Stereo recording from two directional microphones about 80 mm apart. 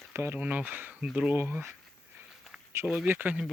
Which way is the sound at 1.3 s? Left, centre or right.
Right.